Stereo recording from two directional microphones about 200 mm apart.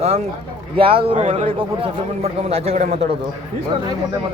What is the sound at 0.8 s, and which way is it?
A man's voice, 25° right (ahead or behind).